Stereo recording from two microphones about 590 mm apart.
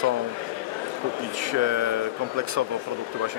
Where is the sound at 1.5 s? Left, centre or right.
Right.